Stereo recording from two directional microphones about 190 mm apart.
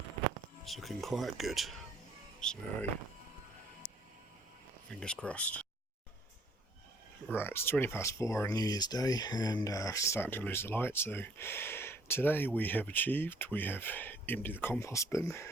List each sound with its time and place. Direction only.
0.6 s speech: centre (ahead or behind)
4.9 s speech: 5° left (ahead or behind)
7.3 s speech: 10° left (ahead or behind)